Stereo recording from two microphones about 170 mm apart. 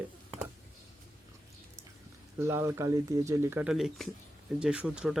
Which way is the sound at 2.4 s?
15° right (ahead or behind).